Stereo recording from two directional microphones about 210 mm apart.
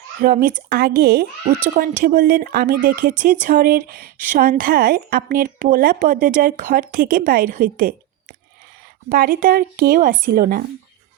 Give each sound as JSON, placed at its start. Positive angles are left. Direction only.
{"t": 0.2, "sound": "a woman's voice", "side_deg": -40}